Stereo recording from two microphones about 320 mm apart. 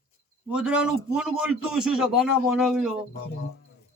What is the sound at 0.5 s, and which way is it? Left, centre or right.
Speech, centre.